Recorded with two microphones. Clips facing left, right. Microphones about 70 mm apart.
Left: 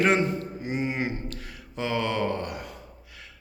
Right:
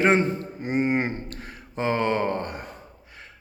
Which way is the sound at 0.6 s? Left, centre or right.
Right.